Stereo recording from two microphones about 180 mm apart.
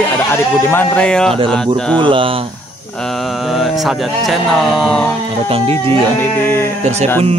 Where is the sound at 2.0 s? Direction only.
30° right (ahead or behind).